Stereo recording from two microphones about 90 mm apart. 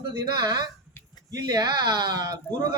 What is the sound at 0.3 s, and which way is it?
A man's voice, 45° right (ahead or behind).